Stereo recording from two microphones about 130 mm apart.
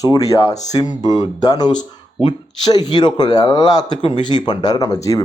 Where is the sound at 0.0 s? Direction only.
25° left (ahead or behind).